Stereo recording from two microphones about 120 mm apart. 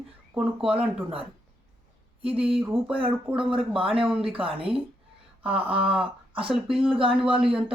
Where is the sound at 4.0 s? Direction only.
5° right (ahead or behind).